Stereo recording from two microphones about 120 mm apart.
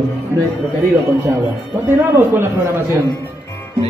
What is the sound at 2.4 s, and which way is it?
Speech, 20° right (ahead or behind).